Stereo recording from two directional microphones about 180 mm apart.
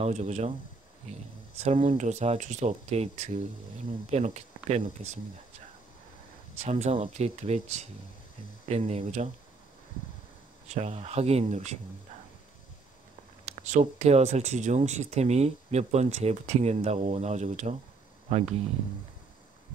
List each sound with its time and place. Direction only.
0.0 s speech: 40° right (ahead or behind)
1.6 s speech: 35° right (ahead or behind)
6.6 s speech: 35° right (ahead or behind)
10.7 s speech: 35° right (ahead or behind)
13.6 s speech: 40° right (ahead or behind)